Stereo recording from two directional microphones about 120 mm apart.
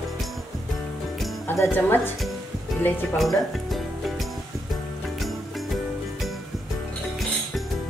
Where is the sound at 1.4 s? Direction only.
15° left (ahead or behind).